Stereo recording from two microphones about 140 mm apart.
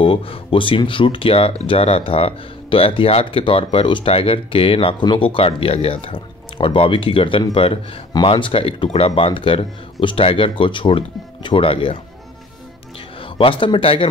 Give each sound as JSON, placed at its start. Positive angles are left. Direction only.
{"t": 0.0, "sound": "speech", "side_deg": 40}
{"t": 13.4, "sound": "speech", "side_deg": 40}